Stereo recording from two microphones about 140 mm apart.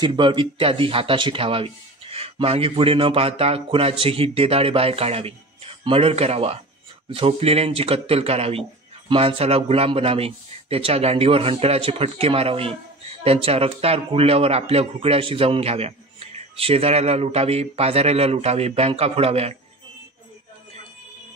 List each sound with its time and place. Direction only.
0.0 s speech: 35° right (ahead or behind)